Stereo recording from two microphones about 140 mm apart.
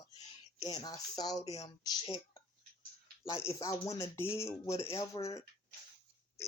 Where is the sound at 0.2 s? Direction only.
25° left (ahead or behind).